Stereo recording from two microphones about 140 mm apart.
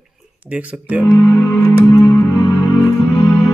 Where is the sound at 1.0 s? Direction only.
20° left (ahead or behind).